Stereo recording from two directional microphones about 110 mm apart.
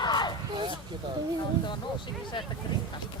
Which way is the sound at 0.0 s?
40° left (ahead or behind).